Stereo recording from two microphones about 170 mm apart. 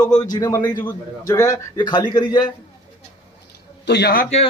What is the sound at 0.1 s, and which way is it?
A man's voice, 20° left (ahead or behind).